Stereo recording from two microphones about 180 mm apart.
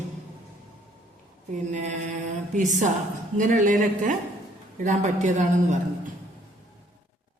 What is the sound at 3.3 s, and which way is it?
A man's voice, 45° right (ahead or behind).